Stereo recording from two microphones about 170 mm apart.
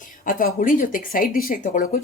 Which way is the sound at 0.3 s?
55° left (ahead or behind).